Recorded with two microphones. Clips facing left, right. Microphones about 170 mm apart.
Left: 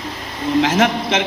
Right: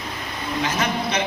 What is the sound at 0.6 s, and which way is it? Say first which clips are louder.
Speech: left 8 dB; 90° left.